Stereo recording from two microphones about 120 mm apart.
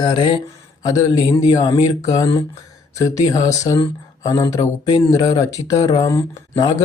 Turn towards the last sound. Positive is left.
turn(degrees=30)  # may be behind; listen again after turning